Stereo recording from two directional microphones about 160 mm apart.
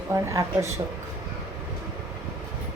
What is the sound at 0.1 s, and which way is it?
Speech, 20° right (ahead or behind).